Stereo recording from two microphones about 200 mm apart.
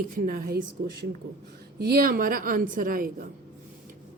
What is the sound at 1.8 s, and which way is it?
A woman's voice, 50° right (ahead or behind).